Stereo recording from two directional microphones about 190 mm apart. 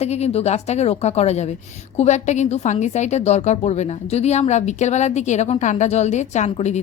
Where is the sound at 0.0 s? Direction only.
35° left (ahead or behind).